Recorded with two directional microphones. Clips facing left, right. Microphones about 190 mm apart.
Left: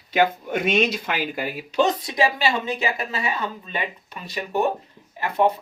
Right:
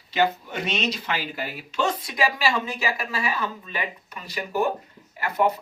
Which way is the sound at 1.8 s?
25° left (ahead or behind).